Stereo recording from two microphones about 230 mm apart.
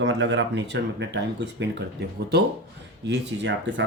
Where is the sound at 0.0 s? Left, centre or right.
Right.